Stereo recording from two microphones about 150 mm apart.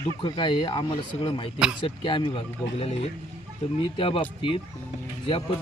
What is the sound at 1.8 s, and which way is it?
Speech, 35° left (ahead or behind).